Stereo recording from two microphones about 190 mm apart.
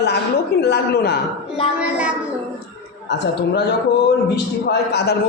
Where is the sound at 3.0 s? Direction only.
60° left (ahead or behind).